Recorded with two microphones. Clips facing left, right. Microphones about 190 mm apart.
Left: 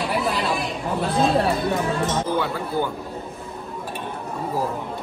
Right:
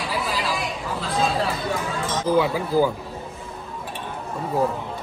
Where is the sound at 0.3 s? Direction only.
60° left (ahead or behind).